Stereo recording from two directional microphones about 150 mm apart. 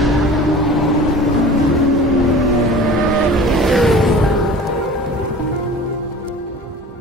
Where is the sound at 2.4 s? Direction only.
Centre (ahead or behind).